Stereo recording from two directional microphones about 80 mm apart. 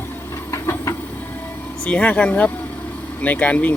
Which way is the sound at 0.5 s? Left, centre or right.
Left.